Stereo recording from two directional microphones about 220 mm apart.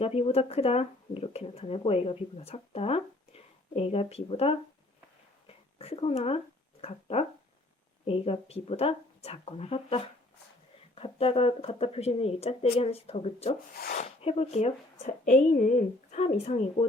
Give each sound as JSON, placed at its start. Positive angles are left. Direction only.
{"t": 0.0, "sound": "speech", "side_deg": 25}
{"t": 5.5, "sound": "a sound", "side_deg": 25}
{"t": 6.8, "sound": "speech", "side_deg": 30}